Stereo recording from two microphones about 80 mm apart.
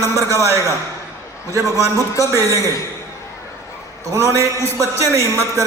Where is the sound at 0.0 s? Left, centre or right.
Right.